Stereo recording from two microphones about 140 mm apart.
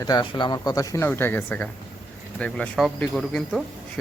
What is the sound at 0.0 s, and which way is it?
Speech, 30° left (ahead or behind).